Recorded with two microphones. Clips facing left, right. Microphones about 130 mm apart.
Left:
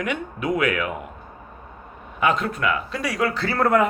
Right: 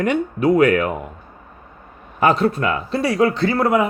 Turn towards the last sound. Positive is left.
turn(degrees=-15)  # may be behind; listen again after turning